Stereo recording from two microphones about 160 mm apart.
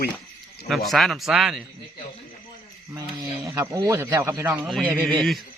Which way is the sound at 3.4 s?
20° right (ahead or behind).